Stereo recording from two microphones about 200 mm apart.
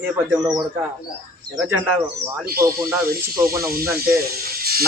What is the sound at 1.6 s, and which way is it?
Speech, 10° right (ahead or behind).